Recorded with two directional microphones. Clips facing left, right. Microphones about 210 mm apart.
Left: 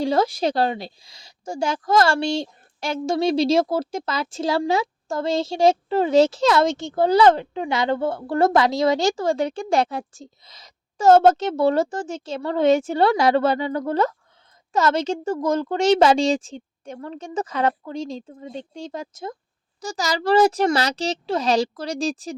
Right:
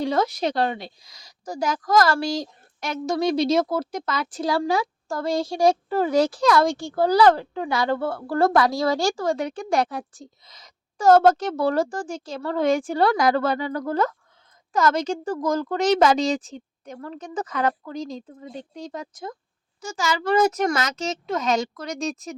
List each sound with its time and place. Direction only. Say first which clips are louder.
0.0 s a woman's voice: left 2 dB; 30° left (ahead or behind)
19.8 s a child's voice: left 1 dB; 35° left (ahead or behind)